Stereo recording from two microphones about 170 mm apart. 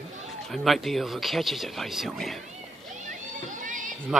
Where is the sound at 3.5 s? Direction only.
50° right (ahead or behind).